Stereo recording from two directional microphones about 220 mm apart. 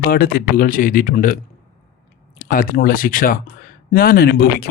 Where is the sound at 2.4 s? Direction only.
40° left (ahead or behind).